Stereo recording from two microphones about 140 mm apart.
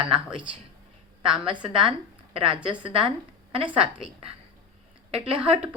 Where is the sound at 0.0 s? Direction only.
5° right (ahead or behind).